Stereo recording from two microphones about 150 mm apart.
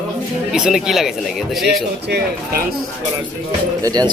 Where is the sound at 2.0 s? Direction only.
85° right.